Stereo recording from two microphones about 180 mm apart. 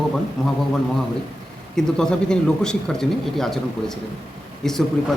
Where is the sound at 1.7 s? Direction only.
5° left (ahead or behind).